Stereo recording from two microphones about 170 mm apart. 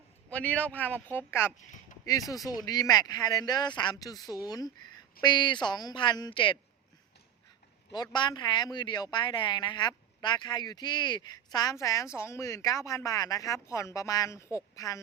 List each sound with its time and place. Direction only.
0.3 s a man's voice: 10° left (ahead or behind)
1.5 s speech: 45° left (ahead or behind)
2.0 s speech: 20° left (ahead or behind)
8.1 s speech: 25° left (ahead or behind)